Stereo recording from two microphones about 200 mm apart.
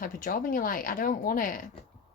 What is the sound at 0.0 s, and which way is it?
A woman's voice, 45° left (ahead or behind).